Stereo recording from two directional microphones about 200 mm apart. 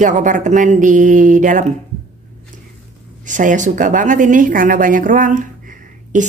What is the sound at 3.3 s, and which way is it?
Speech, 40° right (ahead or behind).